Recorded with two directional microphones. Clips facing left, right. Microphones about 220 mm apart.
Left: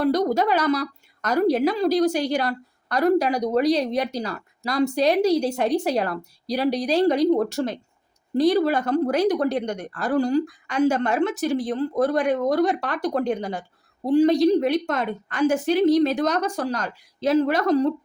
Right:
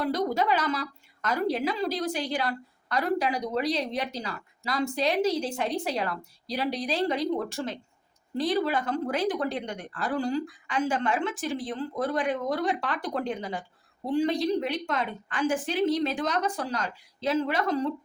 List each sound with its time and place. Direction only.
0.0 s a woman's voice: 40° left (ahead or behind)